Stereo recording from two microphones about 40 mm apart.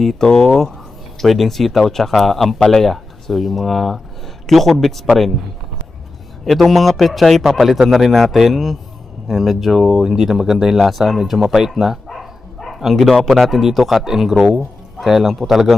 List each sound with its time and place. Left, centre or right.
0.0 s speech: centre
6.4 s speech: centre
12.7 s a man's voice: centre